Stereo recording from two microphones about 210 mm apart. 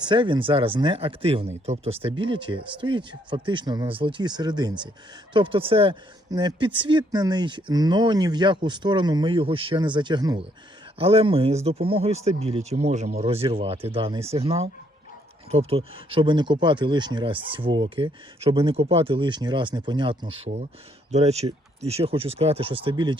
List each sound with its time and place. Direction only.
0.0 s speech: 20° right (ahead or behind)